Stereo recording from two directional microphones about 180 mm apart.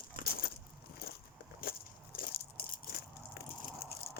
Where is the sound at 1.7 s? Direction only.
55° left (ahead or behind).